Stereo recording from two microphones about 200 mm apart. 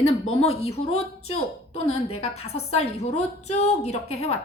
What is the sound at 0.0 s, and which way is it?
A woman's voice, 30° left (ahead or behind).